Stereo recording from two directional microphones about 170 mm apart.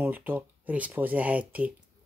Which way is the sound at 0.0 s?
10° right (ahead or behind).